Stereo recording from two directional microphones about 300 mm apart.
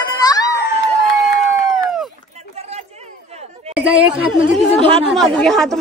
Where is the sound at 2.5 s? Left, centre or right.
Right.